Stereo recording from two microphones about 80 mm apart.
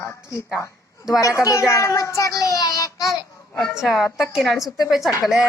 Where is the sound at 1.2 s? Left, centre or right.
Left.